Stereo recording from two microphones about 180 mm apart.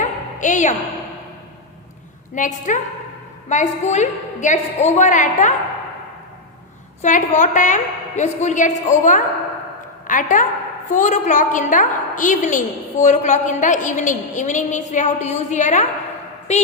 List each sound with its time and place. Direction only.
0.0 s a sound: 45° left (ahead or behind)
2.3 s a woman's voice: 45° left (ahead or behind)
7.0 s a woman's voice: 40° left (ahead or behind)